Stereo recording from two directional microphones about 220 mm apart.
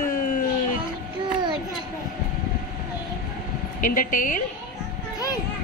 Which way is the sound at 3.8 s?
35° left (ahead or behind).